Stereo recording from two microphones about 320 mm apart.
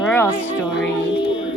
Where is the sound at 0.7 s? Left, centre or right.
Left.